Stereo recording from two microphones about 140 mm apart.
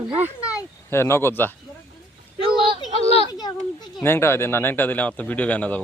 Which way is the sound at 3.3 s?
30° left (ahead or behind).